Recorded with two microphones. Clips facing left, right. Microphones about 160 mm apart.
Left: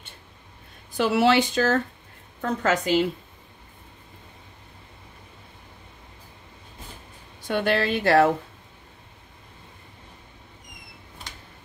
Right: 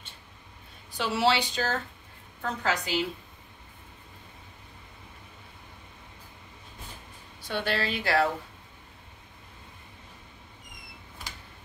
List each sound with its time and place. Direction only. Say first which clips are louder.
0.9 s a woman's voice: left 6 dB; 55° left (ahead or behind)
7.4 s a woman's voice: left 7 dB; 50° left (ahead or behind)